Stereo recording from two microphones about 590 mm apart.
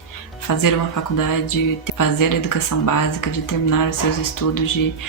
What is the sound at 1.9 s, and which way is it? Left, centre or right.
Speech, left.